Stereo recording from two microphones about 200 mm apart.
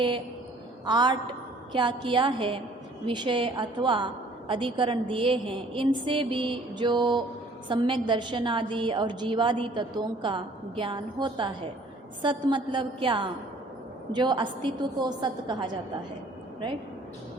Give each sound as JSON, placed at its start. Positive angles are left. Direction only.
{"t": 0.9, "sound": "a woman's voice", "side_deg": -20}